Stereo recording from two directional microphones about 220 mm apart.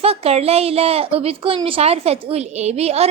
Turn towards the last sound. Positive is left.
turn(degrees=-30)  # may be behind; listen again after turning